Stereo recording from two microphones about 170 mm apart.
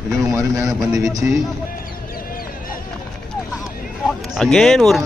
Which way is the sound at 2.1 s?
55° left (ahead or behind).